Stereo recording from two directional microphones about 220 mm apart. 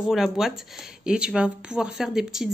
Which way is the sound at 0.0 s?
Centre (ahead or behind).